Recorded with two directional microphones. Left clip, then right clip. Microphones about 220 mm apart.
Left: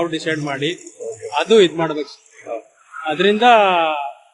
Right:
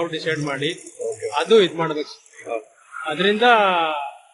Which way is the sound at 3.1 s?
45° left (ahead or behind).